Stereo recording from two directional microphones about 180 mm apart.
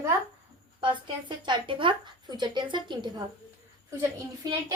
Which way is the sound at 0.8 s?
25° right (ahead or behind).